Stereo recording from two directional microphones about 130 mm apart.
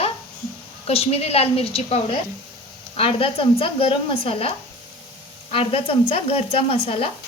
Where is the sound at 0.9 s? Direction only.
50° left (ahead or behind).